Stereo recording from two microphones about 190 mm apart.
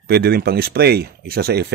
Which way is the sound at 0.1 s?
55° right (ahead or behind).